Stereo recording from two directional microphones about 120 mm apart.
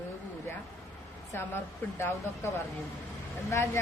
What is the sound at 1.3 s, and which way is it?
A woman's voice, 20° left (ahead or behind).